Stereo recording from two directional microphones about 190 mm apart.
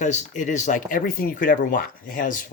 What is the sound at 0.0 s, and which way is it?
Speech, 40° left (ahead or behind).